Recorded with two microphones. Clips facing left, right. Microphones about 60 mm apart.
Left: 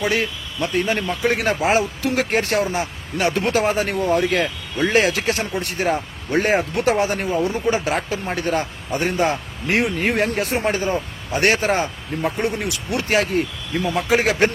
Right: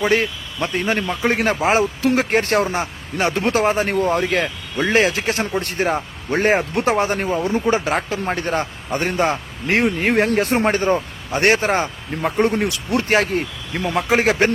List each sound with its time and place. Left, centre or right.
0.0 s a man's voice: right
11.3 s speech: right
13.7 s speech: right